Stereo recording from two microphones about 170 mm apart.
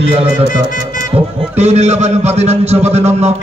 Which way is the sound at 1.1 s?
35° right (ahead or behind).